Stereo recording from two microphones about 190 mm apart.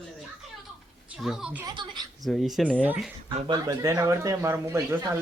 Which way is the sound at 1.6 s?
25° right (ahead or behind).